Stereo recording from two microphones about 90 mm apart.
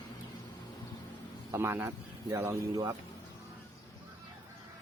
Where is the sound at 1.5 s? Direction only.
25° right (ahead or behind).